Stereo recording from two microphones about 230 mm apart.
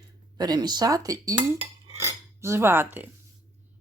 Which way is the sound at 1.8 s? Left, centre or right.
Centre.